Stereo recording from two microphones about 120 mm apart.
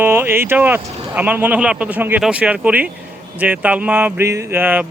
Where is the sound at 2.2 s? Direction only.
10° right (ahead or behind).